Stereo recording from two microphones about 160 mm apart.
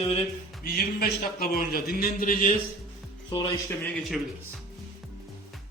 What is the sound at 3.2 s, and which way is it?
Speech, 30° left (ahead or behind).